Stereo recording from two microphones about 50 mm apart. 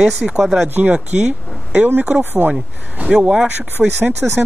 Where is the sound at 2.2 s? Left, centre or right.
Right.